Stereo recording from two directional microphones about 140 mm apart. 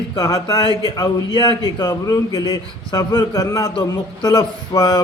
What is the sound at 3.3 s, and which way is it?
Speech, 25° left (ahead or behind).